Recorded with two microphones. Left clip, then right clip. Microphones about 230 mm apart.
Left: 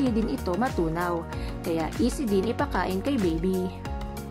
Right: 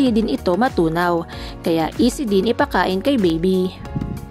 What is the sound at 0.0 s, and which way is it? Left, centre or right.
Speech, right.